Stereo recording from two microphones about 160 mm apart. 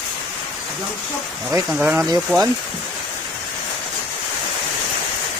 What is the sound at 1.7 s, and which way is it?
Speech, 10° right (ahead or behind).